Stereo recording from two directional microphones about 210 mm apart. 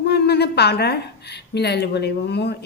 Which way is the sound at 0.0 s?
50° left (ahead or behind).